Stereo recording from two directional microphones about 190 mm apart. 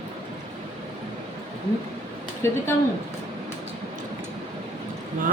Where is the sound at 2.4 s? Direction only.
15° left (ahead or behind).